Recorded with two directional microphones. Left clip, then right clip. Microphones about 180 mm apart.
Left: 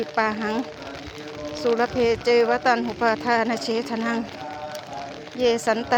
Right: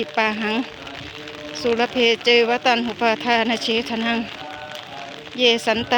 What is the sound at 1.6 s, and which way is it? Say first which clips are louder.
Speech: right 3 dB; 35° right (ahead or behind).